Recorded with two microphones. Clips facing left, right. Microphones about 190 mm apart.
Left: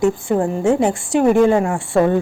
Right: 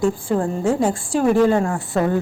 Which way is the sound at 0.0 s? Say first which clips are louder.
Left 3 dB; 25° left (ahead or behind).